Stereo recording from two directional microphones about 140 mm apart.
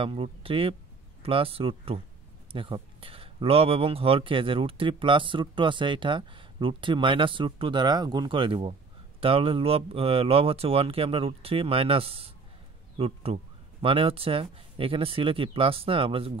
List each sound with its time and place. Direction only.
0.0 s speech: 40° right (ahead or behind)